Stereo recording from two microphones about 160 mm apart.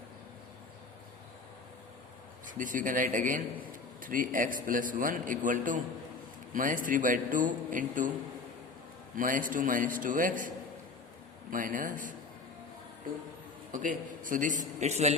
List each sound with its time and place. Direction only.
2.6 s a man's voice: 55° right (ahead or behind)
9.1 s a man's voice: 60° right (ahead or behind)
11.5 s a man's voice: 55° right (ahead or behind)
13.7 s a man's voice: 55° right (ahead or behind)